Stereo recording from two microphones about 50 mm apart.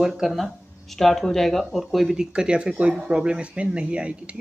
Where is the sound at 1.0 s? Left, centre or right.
Centre.